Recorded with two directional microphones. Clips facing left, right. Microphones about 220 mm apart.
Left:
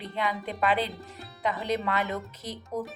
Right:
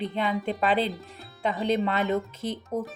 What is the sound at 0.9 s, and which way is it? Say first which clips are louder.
Speech: right 2 dB; centre (ahead or behind).